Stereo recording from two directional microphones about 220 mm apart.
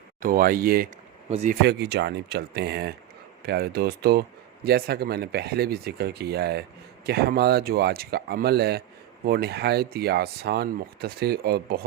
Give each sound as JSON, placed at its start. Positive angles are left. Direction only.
{"t": 0.2, "sound": "speech", "side_deg": -40}
{"t": 1.3, "sound": "speech", "side_deg": -30}
{"t": 1.6, "sound": "speech", "side_deg": -50}